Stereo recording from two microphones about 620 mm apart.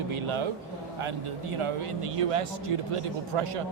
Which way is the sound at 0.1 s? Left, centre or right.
Right.